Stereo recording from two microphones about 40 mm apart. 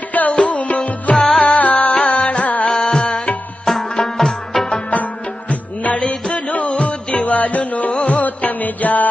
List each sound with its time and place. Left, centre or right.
0.1 s music: left
1.1 s music: centre
1.5 s music: left
2.7 s music: centre
5.5 s music: left